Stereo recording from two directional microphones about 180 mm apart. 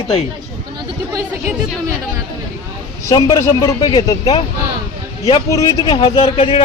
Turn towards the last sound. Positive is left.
turn(degrees=30)  # may be behind; listen again after turning